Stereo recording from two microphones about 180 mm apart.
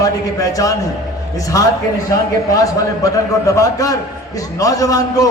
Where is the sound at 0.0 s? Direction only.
20° left (ahead or behind).